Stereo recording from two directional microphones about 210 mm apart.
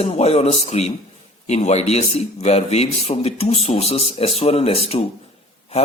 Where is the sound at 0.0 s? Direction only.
30° left (ahead or behind).